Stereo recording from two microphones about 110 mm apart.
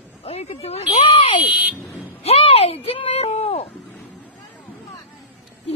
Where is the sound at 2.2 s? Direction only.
60° left (ahead or behind).